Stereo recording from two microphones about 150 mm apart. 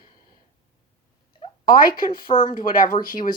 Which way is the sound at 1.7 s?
70° left (ahead or behind).